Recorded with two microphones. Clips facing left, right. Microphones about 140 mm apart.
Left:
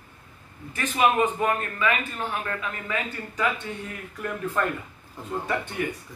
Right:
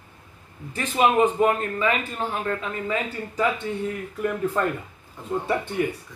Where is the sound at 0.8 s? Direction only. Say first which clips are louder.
Right 3 dB; 30° right (ahead or behind).